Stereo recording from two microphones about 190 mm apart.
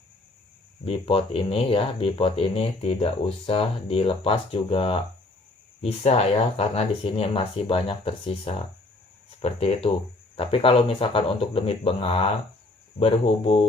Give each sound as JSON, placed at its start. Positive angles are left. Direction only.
{"t": 0.9, "sound": "speech", "side_deg": 30}